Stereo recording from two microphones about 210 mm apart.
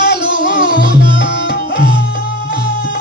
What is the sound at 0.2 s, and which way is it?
Music, 20° right (ahead or behind).